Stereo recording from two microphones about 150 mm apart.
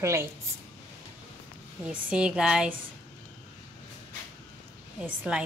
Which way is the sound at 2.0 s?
5° right (ahead or behind).